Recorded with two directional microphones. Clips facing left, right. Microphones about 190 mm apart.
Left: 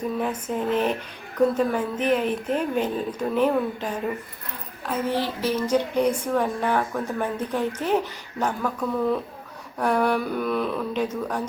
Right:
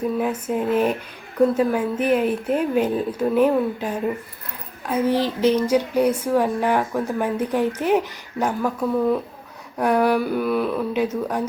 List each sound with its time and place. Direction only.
0.2 s a woman's voice: 10° right (ahead or behind)